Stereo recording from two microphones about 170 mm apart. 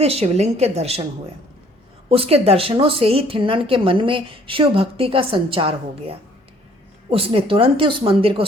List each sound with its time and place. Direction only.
0.0 s a woman's voice: 35° right (ahead or behind)
2.0 s a woman's voice: 35° right (ahead or behind)